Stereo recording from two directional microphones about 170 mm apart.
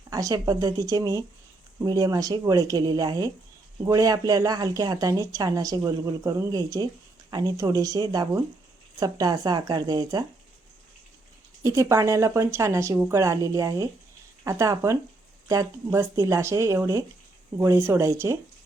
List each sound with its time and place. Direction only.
0.1 s a woman's voice: 20° right (ahead or behind)
11.6 s a woman's voice: 15° right (ahead or behind)